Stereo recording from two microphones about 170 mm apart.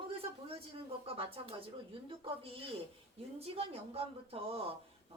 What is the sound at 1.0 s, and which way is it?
A woman's voice, 35° right (ahead or behind).